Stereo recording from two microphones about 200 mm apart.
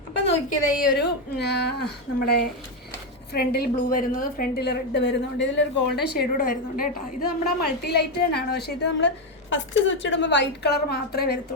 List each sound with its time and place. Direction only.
0.9 s a woman's voice: 55° left (ahead or behind)